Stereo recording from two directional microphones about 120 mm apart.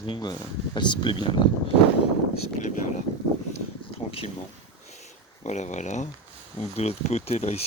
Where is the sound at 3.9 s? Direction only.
55° left (ahead or behind).